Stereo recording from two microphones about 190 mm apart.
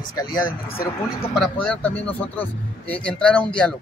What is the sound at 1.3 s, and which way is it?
A man's voice, 5° left (ahead or behind).